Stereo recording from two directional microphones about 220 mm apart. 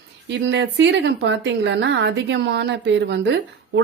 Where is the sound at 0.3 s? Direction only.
55° right (ahead or behind).